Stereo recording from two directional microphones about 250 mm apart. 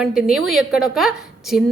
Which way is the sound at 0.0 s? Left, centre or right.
Centre.